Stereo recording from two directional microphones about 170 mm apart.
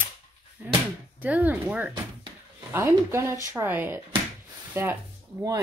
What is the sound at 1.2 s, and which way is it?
Speech, 10° right (ahead or behind).